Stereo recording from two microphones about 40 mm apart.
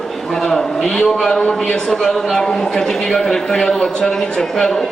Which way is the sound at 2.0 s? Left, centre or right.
Centre.